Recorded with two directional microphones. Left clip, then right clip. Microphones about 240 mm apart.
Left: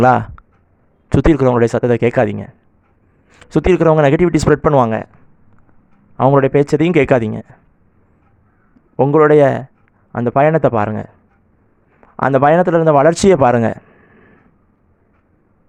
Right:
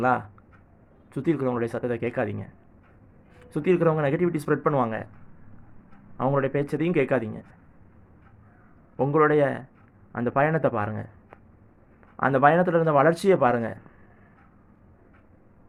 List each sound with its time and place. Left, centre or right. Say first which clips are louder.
0.0 s speech: left 12 dB; left
6.1 s speech: left 13 dB; left
9.0 s a man's voice: left 11 dB; left